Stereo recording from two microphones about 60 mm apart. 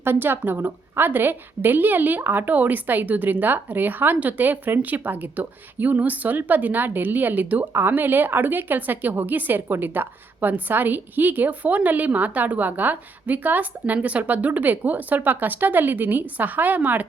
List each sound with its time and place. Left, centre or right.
0.0 s a woman's voice: right
7.7 s a woman's voice: right